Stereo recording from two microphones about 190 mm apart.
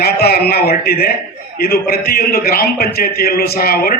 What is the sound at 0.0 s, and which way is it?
A man's voice, 55° left (ahead or behind).